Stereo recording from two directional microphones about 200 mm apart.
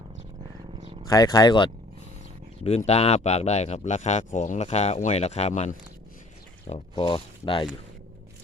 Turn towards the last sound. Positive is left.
turn(degrees=25)  # may be behind; listen again after turning